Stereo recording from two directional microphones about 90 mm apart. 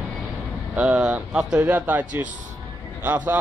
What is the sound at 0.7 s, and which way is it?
Speech, 10° right (ahead or behind).